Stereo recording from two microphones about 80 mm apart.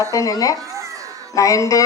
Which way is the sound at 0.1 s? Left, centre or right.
Left.